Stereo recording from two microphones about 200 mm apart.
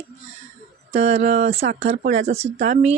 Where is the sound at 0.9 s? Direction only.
35° right (ahead or behind).